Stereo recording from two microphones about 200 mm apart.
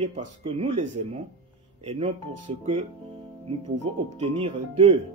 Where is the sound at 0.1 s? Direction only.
30° right (ahead or behind).